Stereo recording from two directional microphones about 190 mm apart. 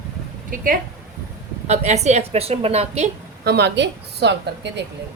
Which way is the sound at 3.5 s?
60° right (ahead or behind).